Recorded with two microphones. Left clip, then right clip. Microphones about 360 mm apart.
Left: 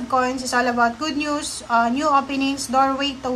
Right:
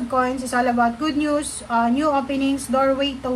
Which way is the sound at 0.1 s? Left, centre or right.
Centre.